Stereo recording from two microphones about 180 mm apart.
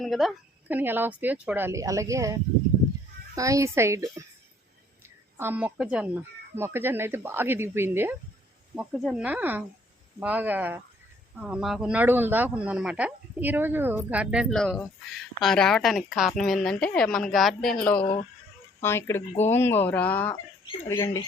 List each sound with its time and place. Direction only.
0.0 s a woman's voice: centre (ahead or behind)
18.0 s speech: 30° left (ahead or behind)
18.8 s speech: 15° left (ahead or behind)